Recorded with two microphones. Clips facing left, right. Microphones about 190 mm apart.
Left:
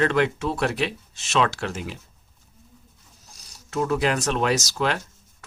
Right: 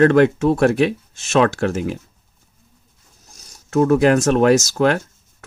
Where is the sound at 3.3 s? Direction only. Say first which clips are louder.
Right 10 dB; 45° right (ahead or behind).